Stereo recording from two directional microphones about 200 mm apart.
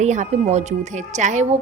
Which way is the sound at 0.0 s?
35° right (ahead or behind).